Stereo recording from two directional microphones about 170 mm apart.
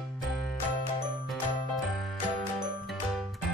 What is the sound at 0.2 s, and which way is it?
Music, centre (ahead or behind).